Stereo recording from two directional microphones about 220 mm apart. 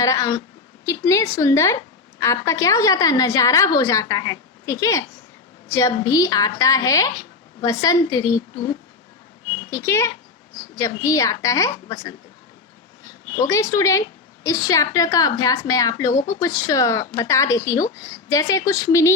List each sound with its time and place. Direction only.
0.0 s a woman's voice: 15° left (ahead or behind)
9.6 s a woman's voice: 10° left (ahead or behind)
13.3 s a woman's voice: 15° left (ahead or behind)